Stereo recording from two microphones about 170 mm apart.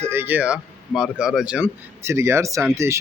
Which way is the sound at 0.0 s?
15° right (ahead or behind).